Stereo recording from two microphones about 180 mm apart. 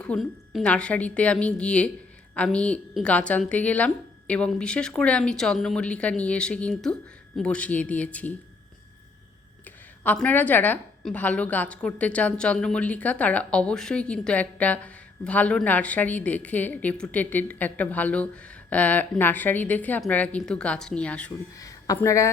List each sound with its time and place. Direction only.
0.0 s a woman's voice: centre (ahead or behind)
10.0 s a woman's voice: 10° left (ahead or behind)
21.6 s a woman's voice: 20° left (ahead or behind)